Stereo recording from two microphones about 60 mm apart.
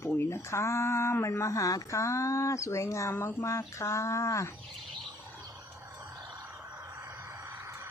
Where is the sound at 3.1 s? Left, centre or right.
Left.